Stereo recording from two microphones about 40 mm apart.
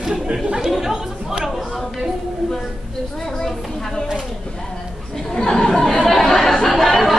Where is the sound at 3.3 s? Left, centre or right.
Centre.